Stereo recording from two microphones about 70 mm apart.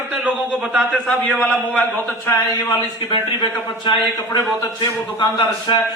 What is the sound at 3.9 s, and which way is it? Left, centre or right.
Speech, left.